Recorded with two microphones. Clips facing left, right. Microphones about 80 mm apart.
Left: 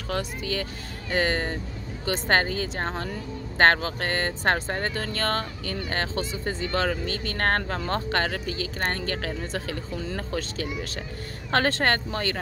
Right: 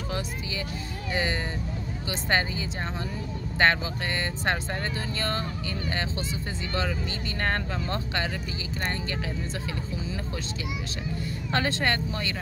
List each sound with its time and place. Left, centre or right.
0.1 s speech: left
5.0 s speech: left
11.5 s speech: left